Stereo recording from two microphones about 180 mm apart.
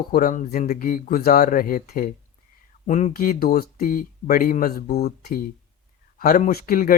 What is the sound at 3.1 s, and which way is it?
Speech, 55° left (ahead or behind).